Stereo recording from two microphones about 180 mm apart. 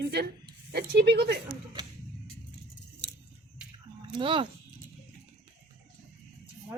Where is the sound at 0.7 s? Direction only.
65° right (ahead or behind).